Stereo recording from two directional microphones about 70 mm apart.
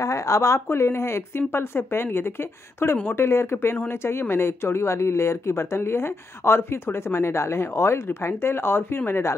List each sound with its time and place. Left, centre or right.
0.0 s speech: left
0.7 s speech: left